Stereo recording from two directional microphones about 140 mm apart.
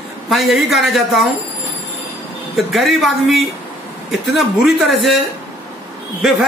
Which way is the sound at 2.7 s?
Centre (ahead or behind).